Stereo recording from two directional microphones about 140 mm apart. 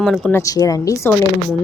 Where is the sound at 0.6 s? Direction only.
25° left (ahead or behind).